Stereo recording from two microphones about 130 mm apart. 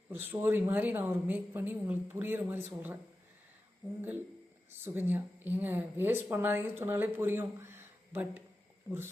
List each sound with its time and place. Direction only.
0.1 s speech: 15° right (ahead or behind)
4.8 s speech: 15° right (ahead or behind)